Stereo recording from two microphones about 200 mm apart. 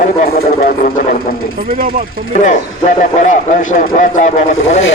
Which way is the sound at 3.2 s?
40° left (ahead or behind).